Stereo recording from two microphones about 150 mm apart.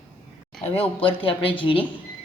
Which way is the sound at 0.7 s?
40° left (ahead or behind).